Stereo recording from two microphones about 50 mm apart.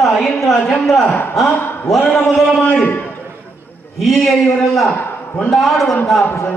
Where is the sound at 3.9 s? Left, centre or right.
Centre.